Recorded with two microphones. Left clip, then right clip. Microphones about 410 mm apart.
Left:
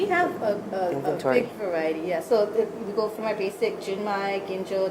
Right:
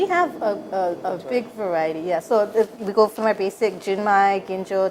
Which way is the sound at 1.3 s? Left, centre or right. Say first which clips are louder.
Right 2 dB; right.